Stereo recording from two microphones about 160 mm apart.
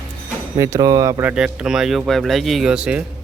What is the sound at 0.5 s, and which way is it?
Speech, 20° right (ahead or behind).